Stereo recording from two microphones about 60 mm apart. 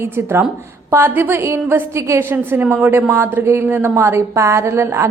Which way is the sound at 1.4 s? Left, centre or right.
Right.